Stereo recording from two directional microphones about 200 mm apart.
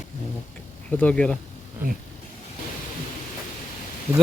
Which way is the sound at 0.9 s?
5° left (ahead or behind).